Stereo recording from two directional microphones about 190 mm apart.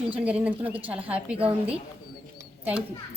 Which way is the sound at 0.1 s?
5° right (ahead or behind).